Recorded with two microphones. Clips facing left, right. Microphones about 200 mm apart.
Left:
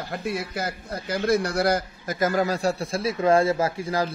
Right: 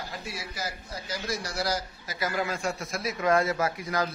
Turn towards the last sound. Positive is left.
turn(degrees=30)  # may be behind; listen again after turning